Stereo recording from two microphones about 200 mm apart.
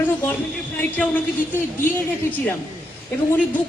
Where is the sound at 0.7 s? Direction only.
10° left (ahead or behind).